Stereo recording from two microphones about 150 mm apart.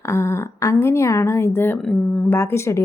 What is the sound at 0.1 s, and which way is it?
A woman's voice, 20° left (ahead or behind).